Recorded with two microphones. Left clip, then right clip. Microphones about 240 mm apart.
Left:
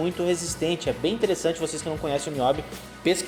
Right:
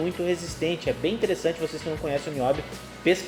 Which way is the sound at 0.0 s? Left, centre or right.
Left.